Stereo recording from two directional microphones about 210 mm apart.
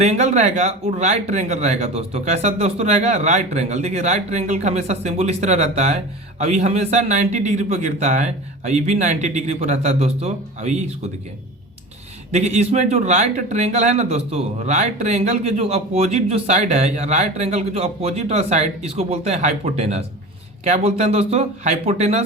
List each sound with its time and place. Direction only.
0.0 s speech: 30° right (ahead or behind)
12.3 s speech: 30° right (ahead or behind)